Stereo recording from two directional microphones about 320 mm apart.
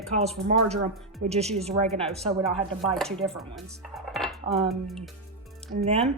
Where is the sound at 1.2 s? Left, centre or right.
Centre.